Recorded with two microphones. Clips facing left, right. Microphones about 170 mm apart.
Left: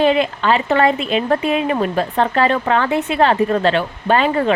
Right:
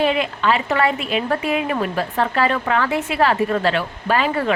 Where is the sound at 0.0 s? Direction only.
35° left (ahead or behind).